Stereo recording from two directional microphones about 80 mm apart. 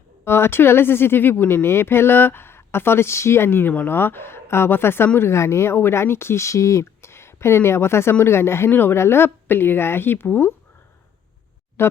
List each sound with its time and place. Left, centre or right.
0.3 s speech: left
11.8 s speech: left